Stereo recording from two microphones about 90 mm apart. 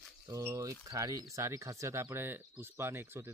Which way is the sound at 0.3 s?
30° right (ahead or behind).